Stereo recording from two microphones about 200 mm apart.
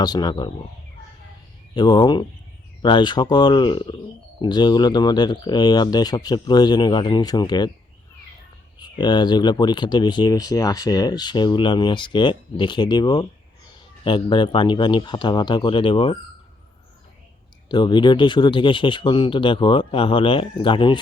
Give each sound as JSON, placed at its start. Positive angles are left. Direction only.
{"t": 0.0, "sound": "speech", "side_deg": 20}
{"t": 1.7, "sound": "speech", "side_deg": 20}
{"t": 8.8, "sound": "speech", "side_deg": 20}
{"t": 17.7, "sound": "speech", "side_deg": 20}